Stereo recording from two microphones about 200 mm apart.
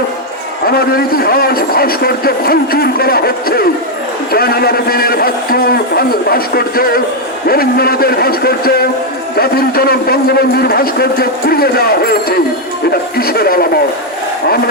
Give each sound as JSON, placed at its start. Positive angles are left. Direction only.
{"t": 0.7, "sound": "a man's voice", "side_deg": 50}